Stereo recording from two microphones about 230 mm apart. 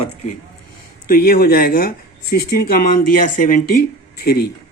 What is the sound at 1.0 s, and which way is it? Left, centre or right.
Speech, left.